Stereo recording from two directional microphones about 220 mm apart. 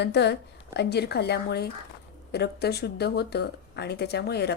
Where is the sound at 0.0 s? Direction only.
50° left (ahead or behind).